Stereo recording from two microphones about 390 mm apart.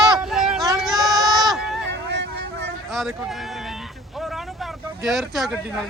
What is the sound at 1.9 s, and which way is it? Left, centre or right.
Vehicle, right.